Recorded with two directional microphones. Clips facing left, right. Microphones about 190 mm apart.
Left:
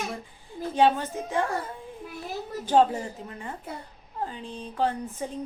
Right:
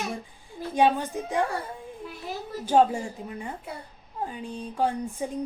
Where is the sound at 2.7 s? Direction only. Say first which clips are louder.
Even; 10° right (ahead or behind).